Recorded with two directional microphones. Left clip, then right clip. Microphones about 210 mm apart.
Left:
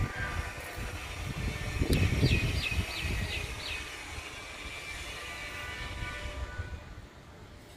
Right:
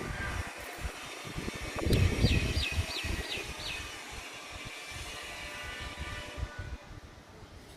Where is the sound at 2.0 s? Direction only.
45° left (ahead or behind).